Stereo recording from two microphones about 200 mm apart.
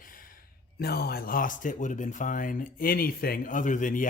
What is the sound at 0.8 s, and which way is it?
Speech, 50° left (ahead or behind).